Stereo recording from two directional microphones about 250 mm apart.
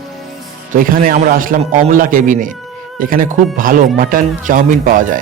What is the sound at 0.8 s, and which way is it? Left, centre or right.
Speech, right.